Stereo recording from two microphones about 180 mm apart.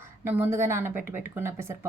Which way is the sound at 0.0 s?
10° right (ahead or behind).